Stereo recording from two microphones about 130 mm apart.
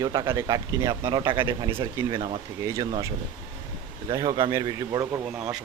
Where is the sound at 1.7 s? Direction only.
20° right (ahead or behind).